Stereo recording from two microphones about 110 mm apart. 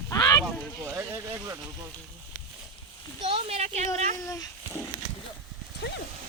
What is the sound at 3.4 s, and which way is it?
Speech, 70° right (ahead or behind).